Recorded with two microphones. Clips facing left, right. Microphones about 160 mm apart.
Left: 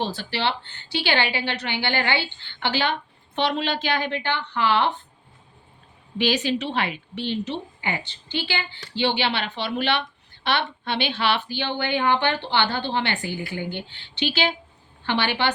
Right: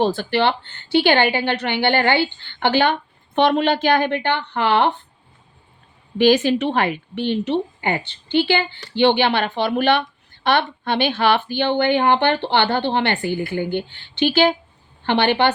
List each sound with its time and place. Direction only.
0.0 s speech: 50° right (ahead or behind)
6.1 s speech: 50° right (ahead or behind)